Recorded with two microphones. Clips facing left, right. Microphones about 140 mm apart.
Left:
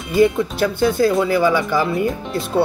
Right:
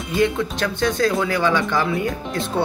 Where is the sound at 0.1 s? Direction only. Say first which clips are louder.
Left 5 dB; 5° left (ahead or behind).